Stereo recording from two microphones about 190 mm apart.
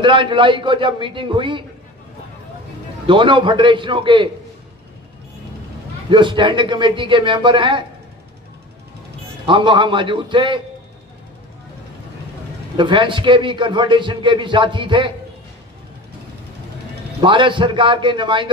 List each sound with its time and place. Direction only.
0.0 s a man's voice: 25° right (ahead or behind)
3.1 s a man's voice: 25° right (ahead or behind)
6.0 s a man's voice: 25° right (ahead or behind)
9.5 s a man's voice: 25° right (ahead or behind)
12.7 s a man's voice: 25° right (ahead or behind)
17.2 s a man's voice: 25° right (ahead or behind)